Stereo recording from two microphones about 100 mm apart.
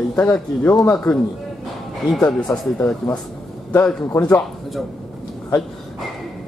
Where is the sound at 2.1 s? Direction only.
10° left (ahead or behind).